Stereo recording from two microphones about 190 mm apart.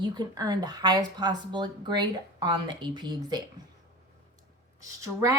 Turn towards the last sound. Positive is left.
turn(degrees=-15)  # may be behind; listen again after turning